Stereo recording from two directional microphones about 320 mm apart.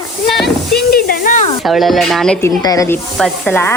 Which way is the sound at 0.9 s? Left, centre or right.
Left.